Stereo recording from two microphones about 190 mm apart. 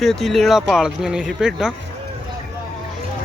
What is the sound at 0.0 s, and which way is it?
Speech, centre (ahead or behind).